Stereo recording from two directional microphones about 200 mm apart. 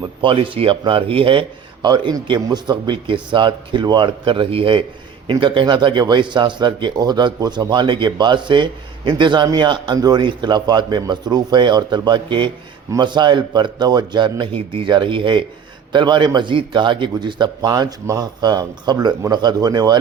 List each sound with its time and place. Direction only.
0.0 s speech: 25° right (ahead or behind)